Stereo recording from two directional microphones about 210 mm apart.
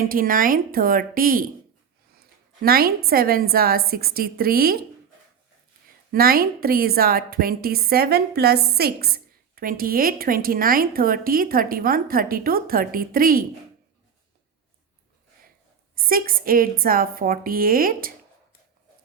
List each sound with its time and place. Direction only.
0.0 s a woman's voice: 40° right (ahead or behind)
2.6 s a woman's voice: 45° right (ahead or behind)
6.1 s a woman's voice: 45° right (ahead or behind)
16.0 s a woman's voice: 45° right (ahead or behind)